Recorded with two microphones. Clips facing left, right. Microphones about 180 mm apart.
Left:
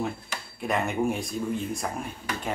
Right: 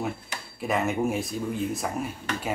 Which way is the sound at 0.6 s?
Centre (ahead or behind).